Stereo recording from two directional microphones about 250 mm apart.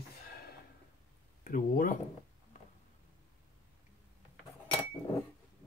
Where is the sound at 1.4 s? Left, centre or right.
Left.